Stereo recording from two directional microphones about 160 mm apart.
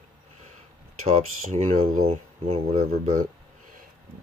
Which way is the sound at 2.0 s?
40° right (ahead or behind).